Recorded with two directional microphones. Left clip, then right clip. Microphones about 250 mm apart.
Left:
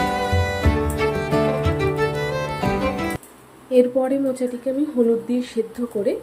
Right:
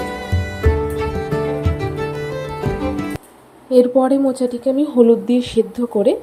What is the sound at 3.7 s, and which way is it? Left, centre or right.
Speech, centre.